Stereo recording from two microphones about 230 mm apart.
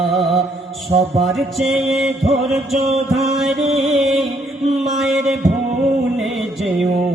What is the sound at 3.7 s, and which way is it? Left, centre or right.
Music, centre.